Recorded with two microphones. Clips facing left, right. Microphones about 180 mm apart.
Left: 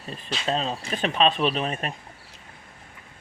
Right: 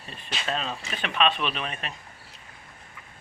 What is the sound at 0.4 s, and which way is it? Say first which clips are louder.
A man's voice: left 4 dB; 35° left (ahead or behind).